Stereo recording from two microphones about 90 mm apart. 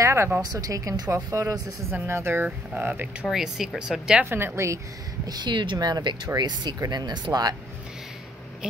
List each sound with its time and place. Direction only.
0.0 s a sound: 30° right (ahead or behind)
0.4 s speech: 45° right (ahead or behind); by 3.3 s 20° right (ahead or behind)
3.3 s speech: 5° right (ahead or behind)
4.3 s speech: 25° right (ahead or behind)
5.2 s speech: 50° right (ahead or behind)